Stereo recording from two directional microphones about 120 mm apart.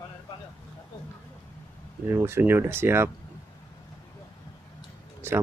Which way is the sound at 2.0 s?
20° right (ahead or behind).